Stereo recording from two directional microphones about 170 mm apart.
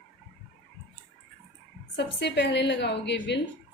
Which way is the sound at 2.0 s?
90° left.